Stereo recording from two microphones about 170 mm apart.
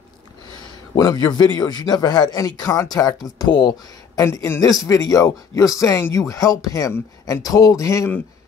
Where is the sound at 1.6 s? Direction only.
25° left (ahead or behind).